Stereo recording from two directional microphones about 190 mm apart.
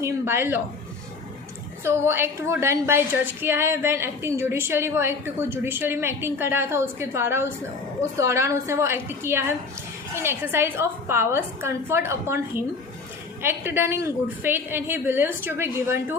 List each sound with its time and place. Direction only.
0.0 s a woman's voice: 10° right (ahead or behind)
1.8 s a woman's voice: 15° right (ahead or behind)